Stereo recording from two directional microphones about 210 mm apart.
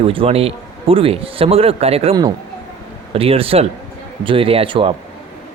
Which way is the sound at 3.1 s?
25° right (ahead or behind).